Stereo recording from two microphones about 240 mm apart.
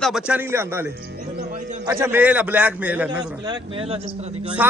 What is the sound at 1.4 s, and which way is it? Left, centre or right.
Music, right.